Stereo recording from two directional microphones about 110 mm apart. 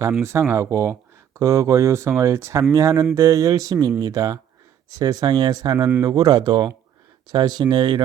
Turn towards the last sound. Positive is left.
turn(degrees=-40)  # may be behind; listen again after turning